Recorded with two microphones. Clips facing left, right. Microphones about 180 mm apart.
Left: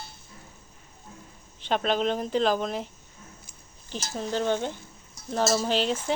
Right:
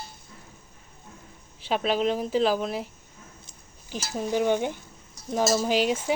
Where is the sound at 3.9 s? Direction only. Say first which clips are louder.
Right 3 dB; 10° right (ahead or behind).